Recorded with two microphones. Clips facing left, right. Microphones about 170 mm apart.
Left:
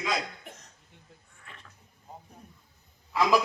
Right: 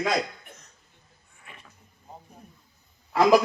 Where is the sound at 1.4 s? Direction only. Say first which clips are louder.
Right 3 dB; 10° right (ahead or behind).